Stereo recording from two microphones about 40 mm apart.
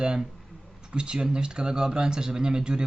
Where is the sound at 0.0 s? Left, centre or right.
Centre.